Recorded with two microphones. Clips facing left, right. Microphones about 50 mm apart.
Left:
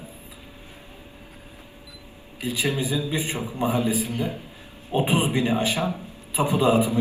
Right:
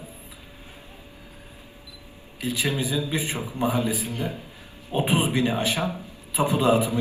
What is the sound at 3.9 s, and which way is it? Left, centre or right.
Speech, left.